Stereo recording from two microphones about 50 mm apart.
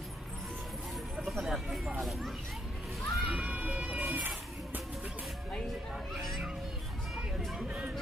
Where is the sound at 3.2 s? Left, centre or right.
Right.